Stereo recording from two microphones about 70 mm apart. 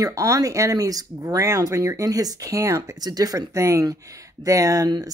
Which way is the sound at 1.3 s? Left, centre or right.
Right.